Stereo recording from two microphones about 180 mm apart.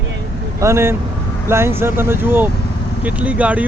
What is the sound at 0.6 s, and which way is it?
Speech, 15° right (ahead or behind).